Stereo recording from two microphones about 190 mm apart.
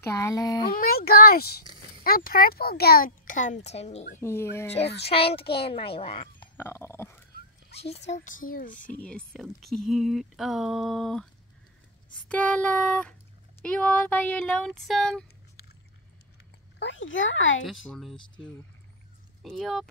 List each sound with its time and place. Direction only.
0.0 s a child's voice: 15° left (ahead or behind)
0.7 s a child's voice: 50° left (ahead or behind); by 4.2 s 35° left (ahead or behind)
4.2 s a sound: 15° left (ahead or behind)
5.0 s a child's voice: 30° left (ahead or behind)
6.5 s dog: 10° left (ahead or behind)
7.8 s a child's voice: 35° left (ahead or behind)
8.7 s speech: 5° left (ahead or behind)
12.3 s a sound: 5° left (ahead or behind)
13.6 s speech: 5° left (ahead or behind)
16.8 s speech: 85° left
17.8 s speech: centre (ahead or behind)
19.4 s speech: centre (ahead or behind)